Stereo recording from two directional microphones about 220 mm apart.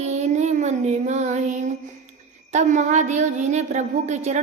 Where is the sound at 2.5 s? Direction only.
30° right (ahead or behind).